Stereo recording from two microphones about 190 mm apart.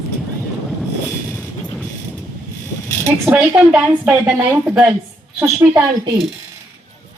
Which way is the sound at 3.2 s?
10° right (ahead or behind).